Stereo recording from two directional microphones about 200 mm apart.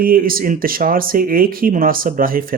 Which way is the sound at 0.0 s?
45° right (ahead or behind).